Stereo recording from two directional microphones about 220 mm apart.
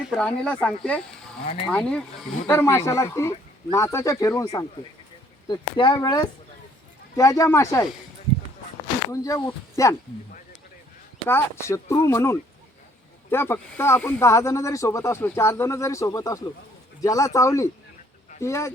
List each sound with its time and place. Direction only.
0.1 s speech: 5° left (ahead or behind)
9.2 s speech: 15° left (ahead or behind)
11.3 s speech: 10° left (ahead or behind)